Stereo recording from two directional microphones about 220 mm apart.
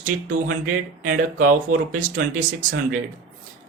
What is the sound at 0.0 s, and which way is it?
Speech, 35° right (ahead or behind).